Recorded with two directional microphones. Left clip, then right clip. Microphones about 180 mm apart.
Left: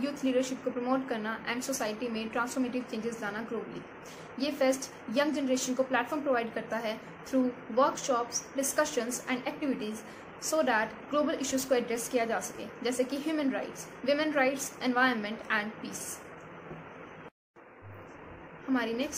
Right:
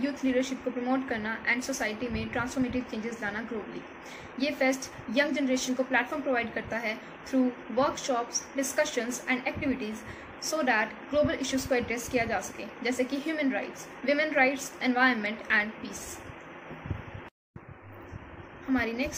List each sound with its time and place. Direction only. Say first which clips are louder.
0.0 s a woman's voice: right 1 dB; 20° left (ahead or behind)
4.4 s a woman's voice: right 1 dB; 20° left (ahead or behind)
18.7 s a woman's voice: right 2 dB; 20° left (ahead or behind)